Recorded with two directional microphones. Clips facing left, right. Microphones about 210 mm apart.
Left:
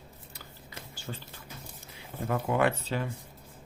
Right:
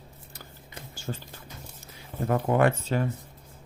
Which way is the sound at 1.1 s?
45° right (ahead or behind).